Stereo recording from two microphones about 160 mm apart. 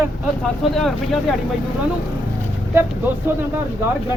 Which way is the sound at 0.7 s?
Centre (ahead or behind).